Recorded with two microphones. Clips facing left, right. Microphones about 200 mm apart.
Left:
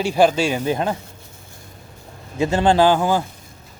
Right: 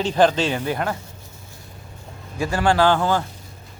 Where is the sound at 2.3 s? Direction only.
20° left (ahead or behind).